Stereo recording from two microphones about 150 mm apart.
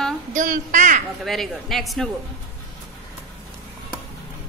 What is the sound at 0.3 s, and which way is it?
Speech, 60° right (ahead or behind).